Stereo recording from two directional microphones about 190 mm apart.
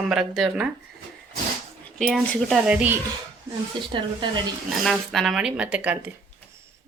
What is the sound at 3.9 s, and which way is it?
Speech, 25° right (ahead or behind).